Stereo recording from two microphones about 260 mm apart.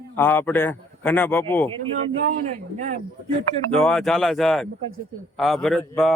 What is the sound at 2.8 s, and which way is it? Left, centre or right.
Speech, right.